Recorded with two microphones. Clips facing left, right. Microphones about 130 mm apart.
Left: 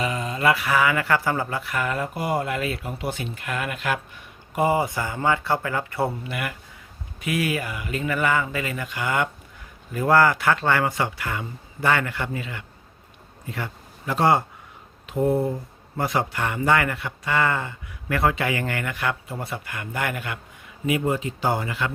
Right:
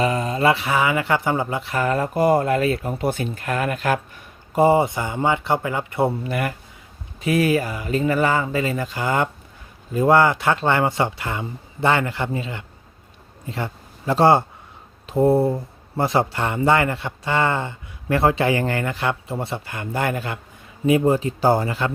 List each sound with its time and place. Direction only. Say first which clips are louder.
0.0 s speech: right 4 dB; 40° right (ahead or behind)
4.6 s speech: right 5 dB; 25° right (ahead or behind)
6.2 s speech: right 6 dB; 40° right (ahead or behind)